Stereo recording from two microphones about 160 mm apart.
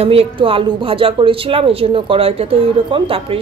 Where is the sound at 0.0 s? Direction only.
35° right (ahead or behind).